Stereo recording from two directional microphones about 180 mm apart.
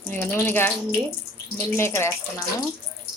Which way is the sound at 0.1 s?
10° left (ahead or behind).